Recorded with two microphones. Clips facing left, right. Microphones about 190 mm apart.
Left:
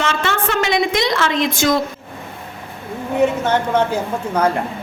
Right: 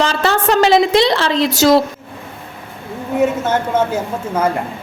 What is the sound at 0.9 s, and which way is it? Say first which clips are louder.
Speech: right 4 dB; 30° right (ahead or behind).